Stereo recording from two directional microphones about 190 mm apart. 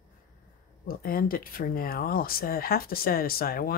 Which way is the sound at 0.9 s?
50° left (ahead or behind).